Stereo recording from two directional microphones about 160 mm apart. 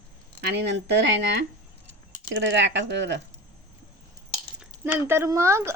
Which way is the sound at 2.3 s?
90° right.